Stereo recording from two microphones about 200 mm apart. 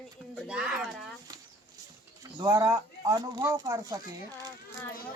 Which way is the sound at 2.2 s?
15° right (ahead or behind).